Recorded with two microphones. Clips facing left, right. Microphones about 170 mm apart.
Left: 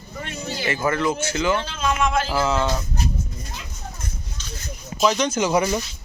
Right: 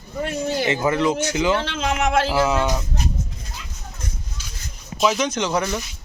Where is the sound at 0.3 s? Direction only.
50° right (ahead or behind).